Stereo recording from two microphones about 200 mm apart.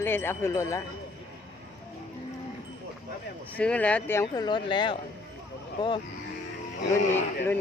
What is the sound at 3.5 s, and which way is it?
Speech, 5° left (ahead or behind).